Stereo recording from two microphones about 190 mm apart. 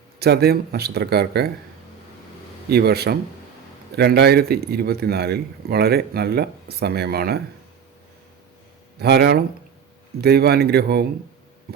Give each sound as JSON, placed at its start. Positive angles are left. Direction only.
{"t": 0.2, "sound": "a man's voice", "side_deg": -55}
{"t": 2.6, "sound": "a man's voice", "side_deg": -55}
{"t": 9.0, "sound": "a man's voice", "side_deg": -60}